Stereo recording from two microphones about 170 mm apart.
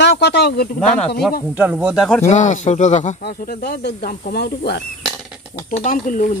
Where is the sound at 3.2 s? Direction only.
60° left (ahead or behind).